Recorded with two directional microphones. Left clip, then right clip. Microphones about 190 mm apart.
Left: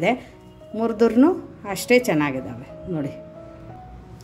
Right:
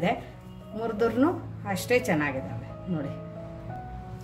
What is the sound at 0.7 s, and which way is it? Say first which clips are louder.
A woman's voice: left 7 dB; 35° left (ahead or behind).